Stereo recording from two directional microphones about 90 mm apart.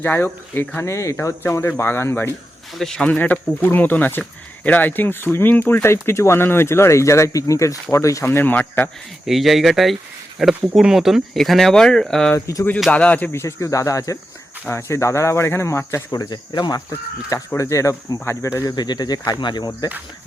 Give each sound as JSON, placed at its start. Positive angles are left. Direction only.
{"t": 0.0, "sound": "speech", "side_deg": 20}
{"t": 2.7, "sound": "speech", "side_deg": 5}
{"t": 3.1, "sound": "speech", "side_deg": 15}
{"t": 9.2, "sound": "speech", "side_deg": 0}
{"t": 13.4, "sound": "speech", "side_deg": 35}
{"t": 16.1, "sound": "speech", "side_deg": 50}
{"t": 17.6, "sound": "speech", "side_deg": 35}
{"t": 18.8, "sound": "speech", "side_deg": 50}